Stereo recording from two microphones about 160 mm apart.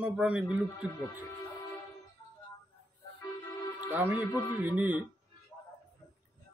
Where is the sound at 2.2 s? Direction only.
25° left (ahead or behind).